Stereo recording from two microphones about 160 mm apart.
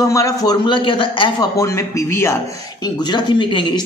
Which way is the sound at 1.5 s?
20° left (ahead or behind).